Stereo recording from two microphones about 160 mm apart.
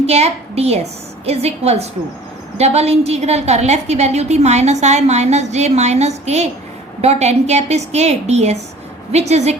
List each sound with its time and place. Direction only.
0.0 s a woman's voice: 40° right (ahead or behind)